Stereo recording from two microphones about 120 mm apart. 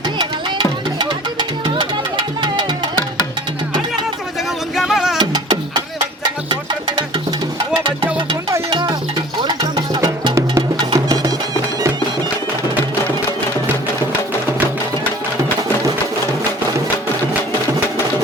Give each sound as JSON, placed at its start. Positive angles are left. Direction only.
{"t": 0.2, "sound": "music", "side_deg": -40}
{"t": 4.7, "sound": "music", "side_deg": -5}
{"t": 5.2, "sound": "a sound", "side_deg": -35}
{"t": 6.5, "sound": "music", "side_deg": -35}
{"t": 8.7, "sound": "music", "side_deg": -35}